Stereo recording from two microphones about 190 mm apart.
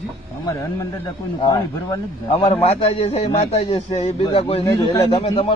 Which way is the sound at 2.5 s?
30° left (ahead or behind).